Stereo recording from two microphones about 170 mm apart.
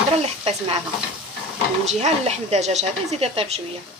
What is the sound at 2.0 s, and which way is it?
Speech, 40° right (ahead or behind).